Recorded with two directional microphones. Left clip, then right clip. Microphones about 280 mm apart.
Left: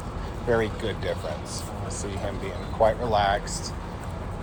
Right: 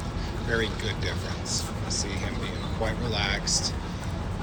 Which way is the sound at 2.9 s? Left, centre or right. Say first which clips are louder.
Left 6 dB; centre.